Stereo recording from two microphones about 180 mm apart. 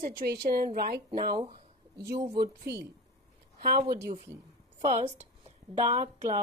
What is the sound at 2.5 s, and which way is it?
Speech, 65° right (ahead or behind).